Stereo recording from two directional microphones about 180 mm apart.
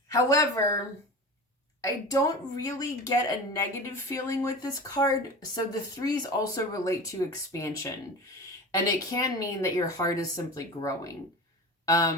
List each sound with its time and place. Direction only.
0.1 s speech: 20° left (ahead or behind)
1.8 s speech: 20° left (ahead or behind)
9.1 s speech: 20° left (ahead or behind)